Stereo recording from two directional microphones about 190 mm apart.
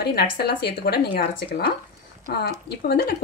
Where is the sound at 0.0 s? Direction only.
55° left (ahead or behind).